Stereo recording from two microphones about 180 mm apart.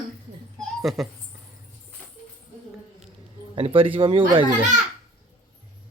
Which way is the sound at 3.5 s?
30° right (ahead or behind).